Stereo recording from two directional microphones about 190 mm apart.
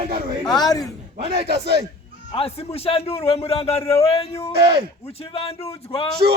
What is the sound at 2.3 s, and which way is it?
A man's voice, 30° left (ahead or behind).